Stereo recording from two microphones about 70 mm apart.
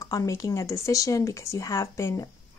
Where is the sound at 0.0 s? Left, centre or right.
Left.